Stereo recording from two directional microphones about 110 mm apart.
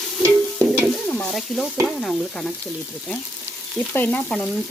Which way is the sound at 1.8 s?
Centre (ahead or behind).